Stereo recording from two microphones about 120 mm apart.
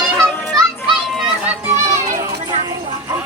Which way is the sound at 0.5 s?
5° right (ahead or behind).